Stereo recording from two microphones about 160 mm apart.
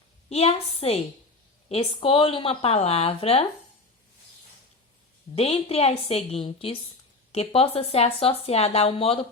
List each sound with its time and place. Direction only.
0.3 s speech: 40° left (ahead or behind)
5.3 s speech: 40° left (ahead or behind)